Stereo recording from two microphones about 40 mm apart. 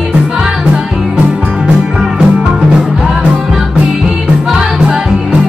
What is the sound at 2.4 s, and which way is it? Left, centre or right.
Music, right.